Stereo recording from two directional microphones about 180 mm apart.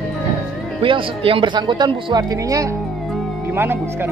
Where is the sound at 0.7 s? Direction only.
30° right (ahead or behind); by 4.1 s 10° right (ahead or behind).